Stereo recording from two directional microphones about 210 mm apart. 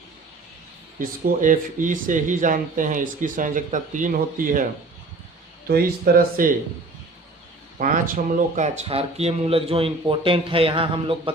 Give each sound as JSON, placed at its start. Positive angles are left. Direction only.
{"t": 0.9, "sound": "speech", "side_deg": -40}
{"t": 5.6, "sound": "speech", "side_deg": -45}
{"t": 7.8, "sound": "speech", "side_deg": -40}